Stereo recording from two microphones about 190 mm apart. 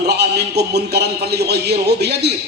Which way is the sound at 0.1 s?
60° right (ahead or behind).